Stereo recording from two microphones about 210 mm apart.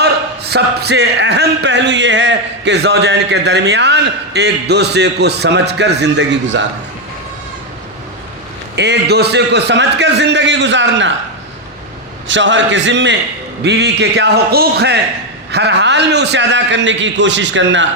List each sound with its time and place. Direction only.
0.0 s speech: 50° right (ahead or behind)
8.7 s a man's voice: 55° right (ahead or behind)
12.3 s a man's voice: 60° right (ahead or behind)